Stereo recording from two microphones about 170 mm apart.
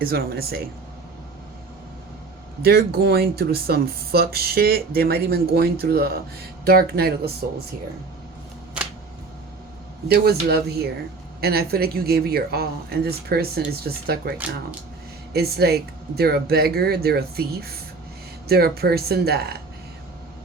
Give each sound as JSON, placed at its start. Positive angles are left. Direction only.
{"t": 0.0, "sound": "speech", "side_deg": -65}
{"t": 2.6, "sound": "speech", "side_deg": -65}
{"t": 10.1, "sound": "speech", "side_deg": -70}